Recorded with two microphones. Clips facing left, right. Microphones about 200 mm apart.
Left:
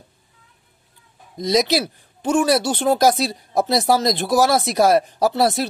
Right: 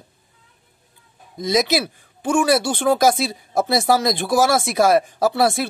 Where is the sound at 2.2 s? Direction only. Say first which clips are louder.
Even; 50° right (ahead or behind).